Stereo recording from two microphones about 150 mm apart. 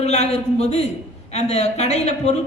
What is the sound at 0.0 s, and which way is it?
A woman's voice, 45° left (ahead or behind).